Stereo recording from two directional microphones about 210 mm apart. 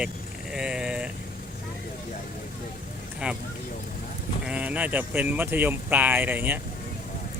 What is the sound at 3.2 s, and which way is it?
Speech, 5° right (ahead or behind).